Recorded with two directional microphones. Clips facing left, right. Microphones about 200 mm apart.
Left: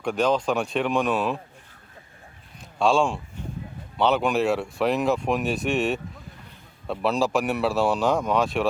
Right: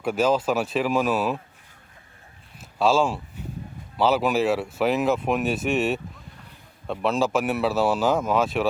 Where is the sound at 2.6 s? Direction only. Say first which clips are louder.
Even; 5° right (ahead or behind).